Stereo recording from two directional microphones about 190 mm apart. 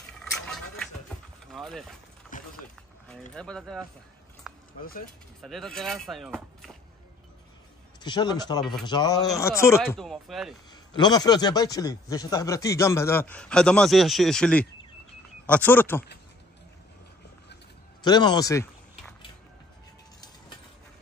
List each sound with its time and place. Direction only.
0.2 s a sound: centre (ahead or behind)
2.3 s a sound: 45° left (ahead or behind)
3.3 s speech: 5° left (ahead or behind)
4.4 s a sound: centre (ahead or behind)
5.4 s speech: centre (ahead or behind)
8.0 s a man's voice: 20° left (ahead or behind)
9.8 s speech: centre (ahead or behind)
10.7 s a man's voice: 20° left (ahead or behind)
18.0 s a man's voice: 20° left (ahead or behind)